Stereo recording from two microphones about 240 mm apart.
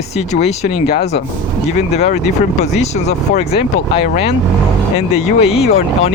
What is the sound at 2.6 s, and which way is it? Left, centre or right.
Speech, left.